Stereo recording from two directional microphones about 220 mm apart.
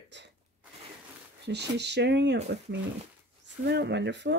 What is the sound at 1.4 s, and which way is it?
Speech, 50° right (ahead or behind).